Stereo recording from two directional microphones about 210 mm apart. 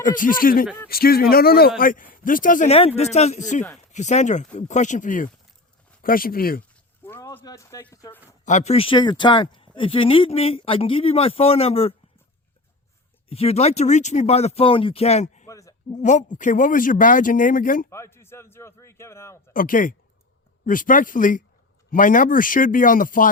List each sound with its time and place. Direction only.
0.0 s speech: 40° left (ahead or behind)
7.0 s speech: 10° left (ahead or behind)
8.4 s speech: 35° left (ahead or behind)
13.2 s speech: 30° left (ahead or behind)
15.4 s a sound: 15° left (ahead or behind)
16.0 s speech: 35° left (ahead or behind)
17.9 s a man's voice: 10° left (ahead or behind)
19.5 s speech: 40° left (ahead or behind)